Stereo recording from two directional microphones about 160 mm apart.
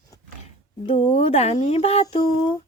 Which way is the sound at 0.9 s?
35° left (ahead or behind).